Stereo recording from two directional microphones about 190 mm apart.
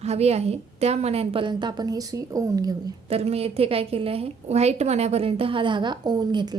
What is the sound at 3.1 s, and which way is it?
A woman's voice, 30° right (ahead or behind).